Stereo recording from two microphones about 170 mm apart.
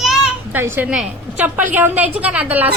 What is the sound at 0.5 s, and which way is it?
A woman's voice, 15° right (ahead or behind).